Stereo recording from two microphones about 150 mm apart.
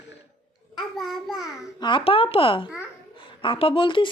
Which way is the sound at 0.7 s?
Centre (ahead or behind).